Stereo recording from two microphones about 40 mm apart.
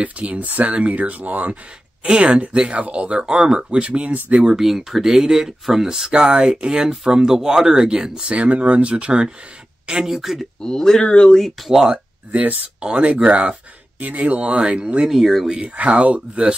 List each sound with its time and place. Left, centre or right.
0.0 s speech: right
2.0 s speech: right
4.1 s speech: right
4.5 s speech: centre
8.3 s speech: right
9.8 s speech: centre
10.6 s speech: centre
12.3 s speech: right
12.8 s speech: right
13.1 s speech: right
13.9 s speech: right
15.0 s speech: centre
15.4 s speech: right
15.7 s speech: right